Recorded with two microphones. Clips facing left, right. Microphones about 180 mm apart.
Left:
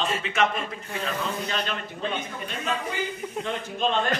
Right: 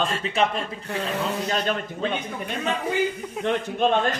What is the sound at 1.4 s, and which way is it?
Speech, 45° right (ahead or behind).